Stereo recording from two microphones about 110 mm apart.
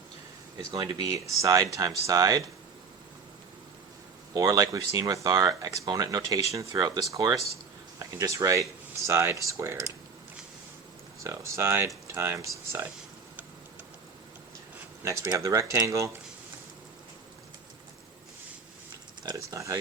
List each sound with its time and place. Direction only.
0.7 s speech: 35° right (ahead or behind)
4.4 s speech: 35° right (ahead or behind)
11.2 s speech: 25° right (ahead or behind)
15.0 s speech: 30° right (ahead or behind)
19.5 s speech: 25° right (ahead or behind)